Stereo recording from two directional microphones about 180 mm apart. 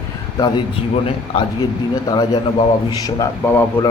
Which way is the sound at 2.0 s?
25° left (ahead or behind).